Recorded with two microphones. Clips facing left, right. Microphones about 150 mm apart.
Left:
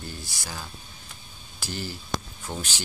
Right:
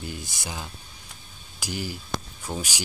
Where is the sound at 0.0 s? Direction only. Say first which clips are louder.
Right 3 dB; 20° right (ahead or behind).